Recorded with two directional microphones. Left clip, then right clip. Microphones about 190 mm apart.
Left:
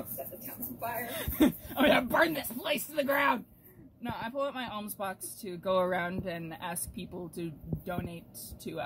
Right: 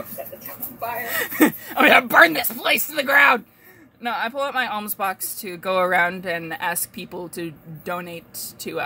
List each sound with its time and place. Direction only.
1.1 s speech: 70° right (ahead or behind)